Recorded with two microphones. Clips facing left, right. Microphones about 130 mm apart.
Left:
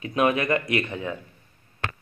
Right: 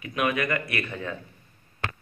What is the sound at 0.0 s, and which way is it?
Speech, 30° left (ahead or behind).